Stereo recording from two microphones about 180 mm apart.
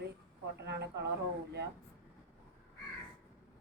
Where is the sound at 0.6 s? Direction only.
70° right (ahead or behind).